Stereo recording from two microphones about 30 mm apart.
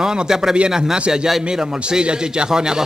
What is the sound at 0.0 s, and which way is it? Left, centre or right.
Speech, centre.